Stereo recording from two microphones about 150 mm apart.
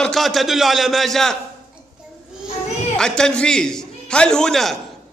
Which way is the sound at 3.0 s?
5° left (ahead or behind).